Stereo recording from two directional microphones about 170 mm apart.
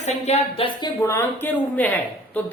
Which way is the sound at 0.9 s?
15° left (ahead or behind).